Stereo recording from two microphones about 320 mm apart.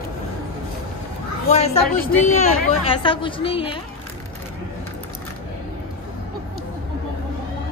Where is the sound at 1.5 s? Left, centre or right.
Left.